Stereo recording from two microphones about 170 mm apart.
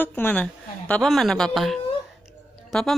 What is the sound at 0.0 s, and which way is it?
A woman's voice, 10° left (ahead or behind).